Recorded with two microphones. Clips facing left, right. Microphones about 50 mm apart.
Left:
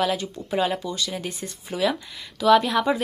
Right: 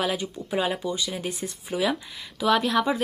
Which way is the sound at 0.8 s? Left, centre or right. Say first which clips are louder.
Right 1 dB; centre.